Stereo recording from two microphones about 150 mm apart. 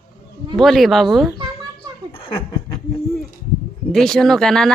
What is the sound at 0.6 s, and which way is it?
Speech, centre (ahead or behind).